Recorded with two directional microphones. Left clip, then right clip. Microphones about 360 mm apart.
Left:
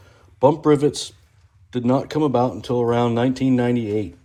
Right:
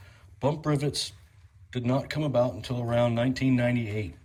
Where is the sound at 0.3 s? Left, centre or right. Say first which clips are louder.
Left 13 dB; left.